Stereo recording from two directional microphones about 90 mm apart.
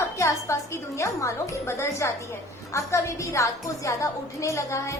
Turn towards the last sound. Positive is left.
turn(degrees=35)  # may be behind; listen again after turning